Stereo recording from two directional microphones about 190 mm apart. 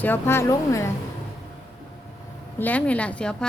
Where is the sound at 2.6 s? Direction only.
10° left (ahead or behind).